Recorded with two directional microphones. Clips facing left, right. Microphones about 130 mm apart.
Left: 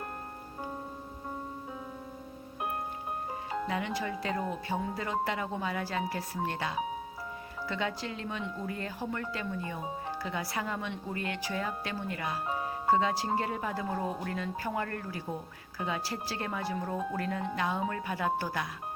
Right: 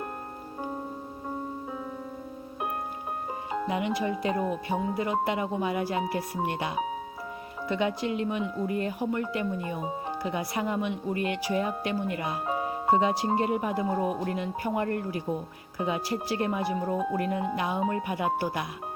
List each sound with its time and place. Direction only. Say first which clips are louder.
3.5 s speech: right 5 dB; 15° right (ahead or behind)